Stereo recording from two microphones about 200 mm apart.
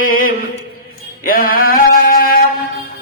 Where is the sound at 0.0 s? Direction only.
45° left (ahead or behind).